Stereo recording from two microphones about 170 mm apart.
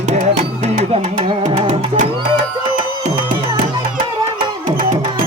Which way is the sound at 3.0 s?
50° right (ahead or behind).